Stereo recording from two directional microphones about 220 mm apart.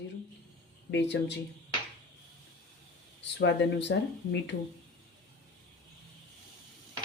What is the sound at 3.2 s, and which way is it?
Speech, 50° left (ahead or behind).